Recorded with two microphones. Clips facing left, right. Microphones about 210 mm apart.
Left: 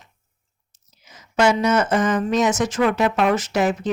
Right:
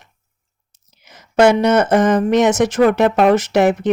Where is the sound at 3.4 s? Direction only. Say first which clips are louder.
Right 6 dB; 65° right (ahead or behind).